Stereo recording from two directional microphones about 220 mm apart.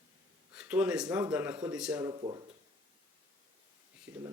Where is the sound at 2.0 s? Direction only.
20° right (ahead or behind).